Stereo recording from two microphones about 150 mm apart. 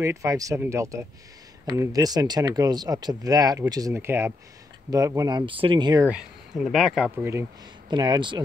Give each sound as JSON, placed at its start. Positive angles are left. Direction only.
{"t": 0.0, "sound": "speech", "side_deg": -20}
{"t": 6.0, "sound": "speech", "side_deg": -5}
{"t": 7.2, "sound": "speech", "side_deg": -15}
{"t": 7.9, "sound": "speech", "side_deg": -30}